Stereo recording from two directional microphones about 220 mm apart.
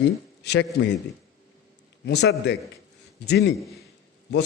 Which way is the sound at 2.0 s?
50° left (ahead or behind).